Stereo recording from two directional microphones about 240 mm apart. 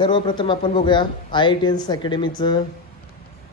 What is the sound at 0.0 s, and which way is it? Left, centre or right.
A man's voice, centre.